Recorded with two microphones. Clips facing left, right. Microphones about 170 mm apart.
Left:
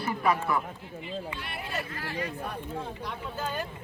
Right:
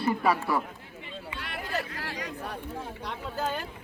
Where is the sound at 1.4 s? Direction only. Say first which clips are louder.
Right 2 dB; 85° right.